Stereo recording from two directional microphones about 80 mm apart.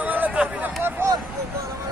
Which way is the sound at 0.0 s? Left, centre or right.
Centre.